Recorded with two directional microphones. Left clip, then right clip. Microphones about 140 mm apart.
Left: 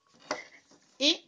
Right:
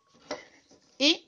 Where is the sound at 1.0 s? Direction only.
45° right (ahead or behind).